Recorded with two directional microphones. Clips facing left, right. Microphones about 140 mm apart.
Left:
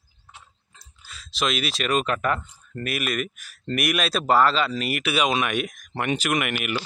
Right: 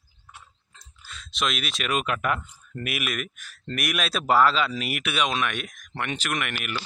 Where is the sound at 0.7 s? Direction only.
5° left (ahead or behind).